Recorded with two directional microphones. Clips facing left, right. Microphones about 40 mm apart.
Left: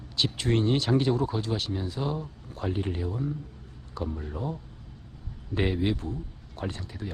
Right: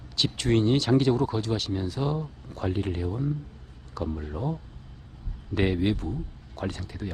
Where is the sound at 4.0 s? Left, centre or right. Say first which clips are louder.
Right 2 dB; right.